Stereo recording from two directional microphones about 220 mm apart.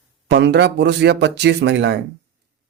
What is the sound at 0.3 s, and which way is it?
A man's voice, 50° right (ahead or behind).